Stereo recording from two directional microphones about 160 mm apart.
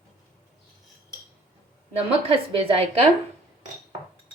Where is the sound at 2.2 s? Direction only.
35° right (ahead or behind).